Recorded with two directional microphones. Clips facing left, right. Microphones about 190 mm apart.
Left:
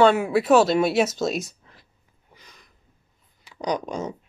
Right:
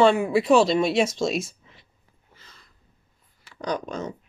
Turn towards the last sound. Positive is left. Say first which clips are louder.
# left 2 dB
turn(degrees=15)  # may be behind; listen again after turning